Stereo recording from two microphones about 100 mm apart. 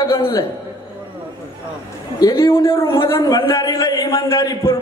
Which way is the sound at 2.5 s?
60° left (ahead or behind).